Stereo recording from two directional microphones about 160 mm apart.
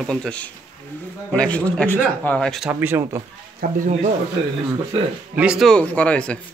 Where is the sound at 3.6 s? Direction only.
55° right (ahead or behind).